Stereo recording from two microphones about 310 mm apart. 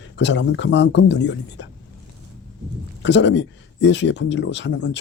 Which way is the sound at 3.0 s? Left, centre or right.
Left.